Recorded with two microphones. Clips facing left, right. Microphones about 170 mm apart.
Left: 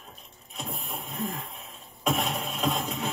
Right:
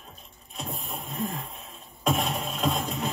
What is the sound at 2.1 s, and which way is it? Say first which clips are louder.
Music: right 1 dB; centre (ahead or behind).